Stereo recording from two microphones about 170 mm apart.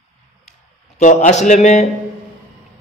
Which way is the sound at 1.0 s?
45° left (ahead or behind).